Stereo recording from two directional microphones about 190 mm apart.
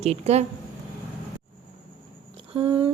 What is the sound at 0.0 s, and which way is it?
Speech, 35° right (ahead or behind).